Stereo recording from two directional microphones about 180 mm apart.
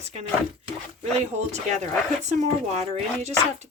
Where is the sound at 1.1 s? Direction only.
40° right (ahead or behind).